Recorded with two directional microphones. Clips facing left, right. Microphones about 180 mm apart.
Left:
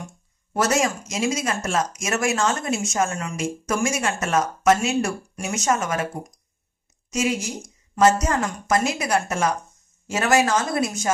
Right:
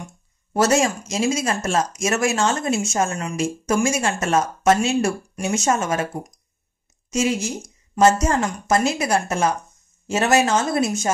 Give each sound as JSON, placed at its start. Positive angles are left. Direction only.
{"t": 0.5, "sound": "a woman's voice", "side_deg": -30}
{"t": 7.1, "sound": "a woman's voice", "side_deg": -25}